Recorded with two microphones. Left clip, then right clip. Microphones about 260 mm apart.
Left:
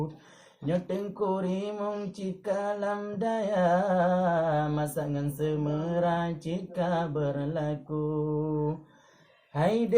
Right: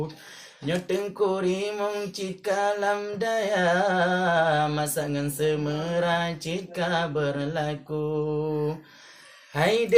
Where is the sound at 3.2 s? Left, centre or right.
Right.